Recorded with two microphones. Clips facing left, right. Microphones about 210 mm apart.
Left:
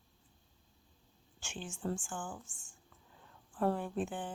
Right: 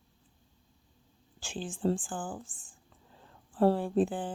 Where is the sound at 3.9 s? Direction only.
35° right (ahead or behind).